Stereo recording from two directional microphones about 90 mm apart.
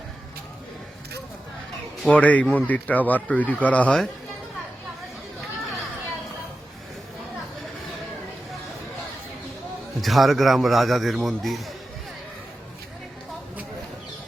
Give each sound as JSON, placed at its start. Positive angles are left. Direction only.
{"t": 2.0, "sound": "a man's voice", "side_deg": 15}
{"t": 10.0, "sound": "a man's voice", "side_deg": 0}